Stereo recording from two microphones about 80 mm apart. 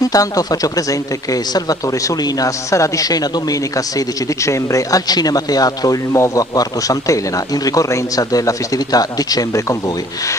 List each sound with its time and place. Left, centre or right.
0.0 s speech: left
4.5 s speech: left
6.1 s a man's voice: left
6.5 s speech: left